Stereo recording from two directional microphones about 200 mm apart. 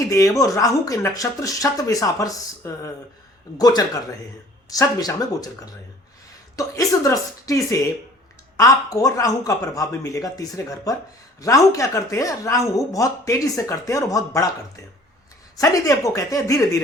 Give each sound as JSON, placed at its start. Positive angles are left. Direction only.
{"t": 0.1, "sound": "speech", "side_deg": 15}
{"t": 15.5, "sound": "speech", "side_deg": 15}